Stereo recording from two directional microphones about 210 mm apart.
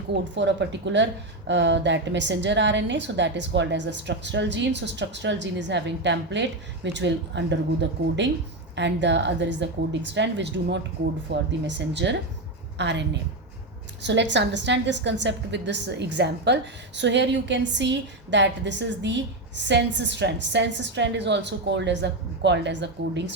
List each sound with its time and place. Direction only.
0.1 s a woman's voice: 55° right (ahead or behind)